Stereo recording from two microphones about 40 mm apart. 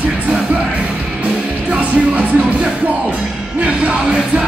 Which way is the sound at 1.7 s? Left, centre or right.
Right.